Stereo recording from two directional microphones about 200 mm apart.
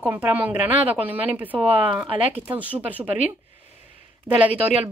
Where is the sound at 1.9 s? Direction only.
25° right (ahead or behind).